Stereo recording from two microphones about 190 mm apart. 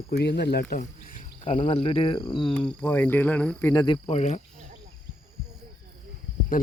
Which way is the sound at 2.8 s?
10° left (ahead or behind).